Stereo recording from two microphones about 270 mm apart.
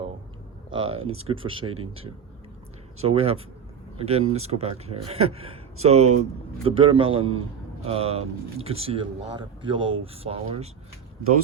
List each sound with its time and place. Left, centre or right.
0.7 s speech: right
0.9 s speech: right